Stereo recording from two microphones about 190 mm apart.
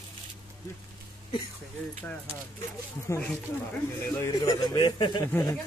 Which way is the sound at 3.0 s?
10° left (ahead or behind).